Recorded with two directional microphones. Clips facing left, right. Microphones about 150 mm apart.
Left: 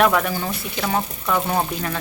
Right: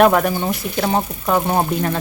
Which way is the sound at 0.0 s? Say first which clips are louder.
Right 5 dB; 40° right (ahead or behind).